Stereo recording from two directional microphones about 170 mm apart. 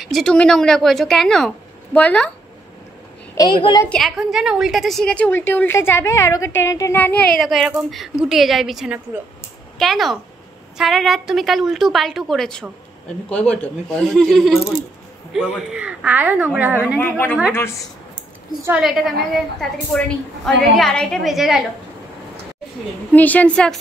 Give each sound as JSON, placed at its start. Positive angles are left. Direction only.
{"t": 0.0, "sound": "a woman's voice", "side_deg": 0}
{"t": 3.3, "sound": "a woman's voice", "side_deg": 25}
{"t": 3.8, "sound": "a woman's voice", "side_deg": 5}
{"t": 7.2, "sound": "a woman's voice", "side_deg": 0}
{"t": 17.0, "sound": "a woman's voice", "side_deg": 10}
{"t": 18.7, "sound": "a woman's voice", "side_deg": -5}
{"t": 23.1, "sound": "a woman's voice", "side_deg": 10}